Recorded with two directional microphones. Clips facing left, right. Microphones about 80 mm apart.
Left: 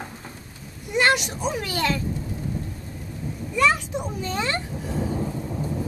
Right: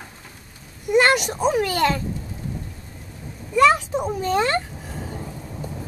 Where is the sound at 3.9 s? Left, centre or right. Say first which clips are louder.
Right 6 dB; right.